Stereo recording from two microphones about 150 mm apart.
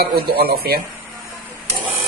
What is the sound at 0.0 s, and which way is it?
Dishes, 90° right.